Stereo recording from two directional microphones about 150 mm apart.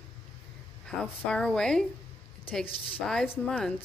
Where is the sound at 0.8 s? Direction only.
5° left (ahead or behind).